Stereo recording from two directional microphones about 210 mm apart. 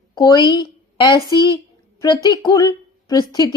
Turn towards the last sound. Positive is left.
turn(degrees=20)  # may be behind; listen again after turning